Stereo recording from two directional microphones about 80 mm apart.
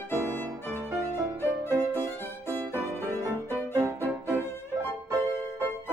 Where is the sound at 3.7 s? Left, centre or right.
Right.